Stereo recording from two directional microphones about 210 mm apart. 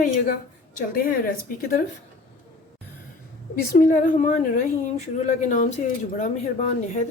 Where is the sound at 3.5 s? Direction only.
40° left (ahead or behind).